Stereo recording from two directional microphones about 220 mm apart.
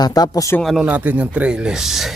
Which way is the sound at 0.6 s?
Centre (ahead or behind).